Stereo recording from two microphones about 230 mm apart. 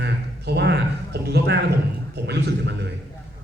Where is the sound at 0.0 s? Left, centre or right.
Right.